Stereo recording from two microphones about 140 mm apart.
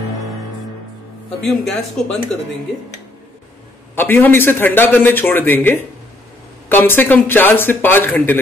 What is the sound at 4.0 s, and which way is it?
A man's voice, 15° left (ahead or behind).